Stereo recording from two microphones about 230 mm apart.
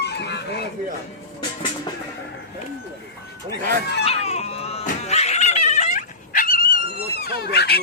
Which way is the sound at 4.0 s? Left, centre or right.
Left.